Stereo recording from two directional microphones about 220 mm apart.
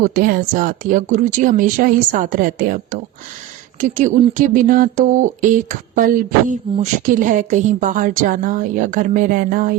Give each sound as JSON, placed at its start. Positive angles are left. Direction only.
{"t": 0.0, "sound": "speech", "side_deg": -40}